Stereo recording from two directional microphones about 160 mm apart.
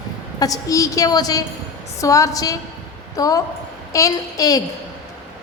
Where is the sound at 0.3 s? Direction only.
20° left (ahead or behind).